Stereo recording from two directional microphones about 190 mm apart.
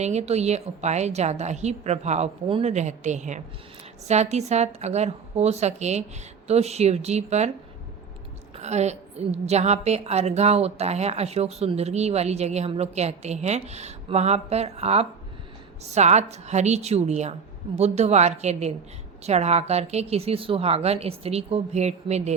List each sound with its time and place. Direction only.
0.0 s a woman's voice: 35° right (ahead or behind)
8.5 s a woman's voice: 35° right (ahead or behind)